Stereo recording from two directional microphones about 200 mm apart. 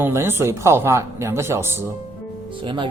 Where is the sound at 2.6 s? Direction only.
25° right (ahead or behind).